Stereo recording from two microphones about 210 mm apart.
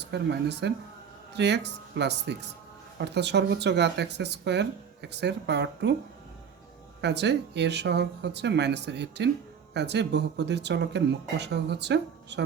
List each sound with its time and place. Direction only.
0.0 s speech: 55° right (ahead or behind)
7.0 s speech: 55° right (ahead or behind)